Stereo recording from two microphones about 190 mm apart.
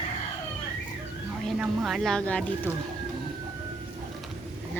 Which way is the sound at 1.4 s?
Centre (ahead or behind).